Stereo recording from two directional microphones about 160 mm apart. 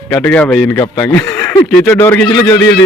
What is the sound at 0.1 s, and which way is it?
Speech, 5° left (ahead or behind).